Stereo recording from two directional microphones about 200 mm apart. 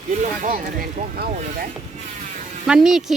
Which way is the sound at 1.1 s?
45° right (ahead or behind).